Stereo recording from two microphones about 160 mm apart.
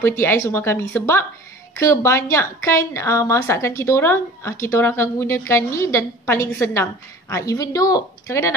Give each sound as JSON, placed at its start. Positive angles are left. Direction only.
{"t": 0.0, "sound": "a woman's voice", "side_deg": 15}